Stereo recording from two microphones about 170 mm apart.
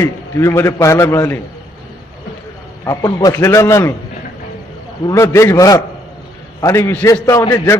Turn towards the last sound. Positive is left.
turn(degrees=15)  # may be behind; listen again after turning